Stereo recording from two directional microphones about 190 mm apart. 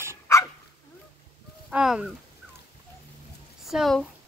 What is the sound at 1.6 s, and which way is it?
Speech, 5° right (ahead or behind).